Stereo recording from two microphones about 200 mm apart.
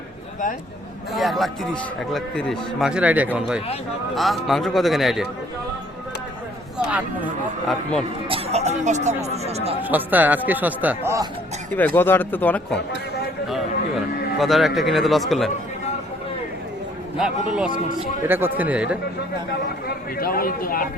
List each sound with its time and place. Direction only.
1.1 s a man's voice: centre (ahead or behind)
6.7 s speech: 5° right (ahead or behind)
8.3 s speech: 30° right (ahead or behind)
9.9 s speech: 10° right (ahead or behind)
11.7 s speech: 10° left (ahead or behind)
17.2 s a man's voice: 5° right (ahead or behind)
20.1 s a man's voice: 45° left (ahead or behind)